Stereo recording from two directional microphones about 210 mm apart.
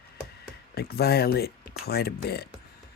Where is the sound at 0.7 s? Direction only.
50° left (ahead or behind).